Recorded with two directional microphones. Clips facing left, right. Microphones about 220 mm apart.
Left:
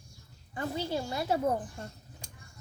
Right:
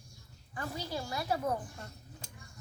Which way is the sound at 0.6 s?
25° left (ahead or behind).